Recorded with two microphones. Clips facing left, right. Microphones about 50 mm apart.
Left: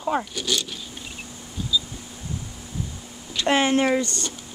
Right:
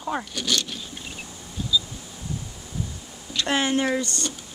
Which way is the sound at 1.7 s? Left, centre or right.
Centre.